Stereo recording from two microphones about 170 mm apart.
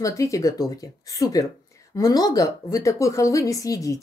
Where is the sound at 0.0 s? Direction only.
20° left (ahead or behind).